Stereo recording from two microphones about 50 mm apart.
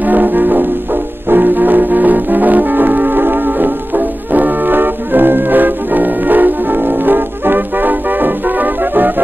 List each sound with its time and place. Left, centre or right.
0.0 s music: right